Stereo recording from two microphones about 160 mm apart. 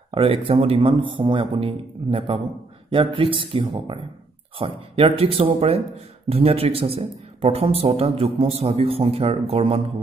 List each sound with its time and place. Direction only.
0.1 s a man's voice: 35° right (ahead or behind)